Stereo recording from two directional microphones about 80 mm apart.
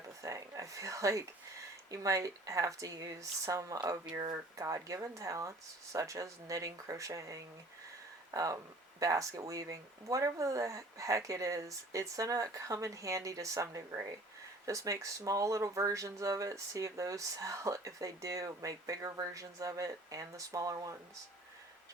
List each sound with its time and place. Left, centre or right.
0.2 s speech: right